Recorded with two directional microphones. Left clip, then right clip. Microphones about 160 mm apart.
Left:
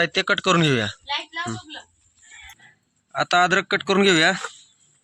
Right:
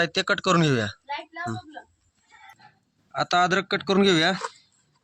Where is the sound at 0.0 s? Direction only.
Centre (ahead or behind).